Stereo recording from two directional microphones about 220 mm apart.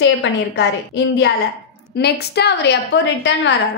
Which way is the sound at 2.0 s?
50° left (ahead or behind).